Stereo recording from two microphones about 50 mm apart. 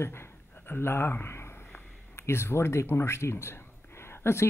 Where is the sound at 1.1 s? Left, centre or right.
Left.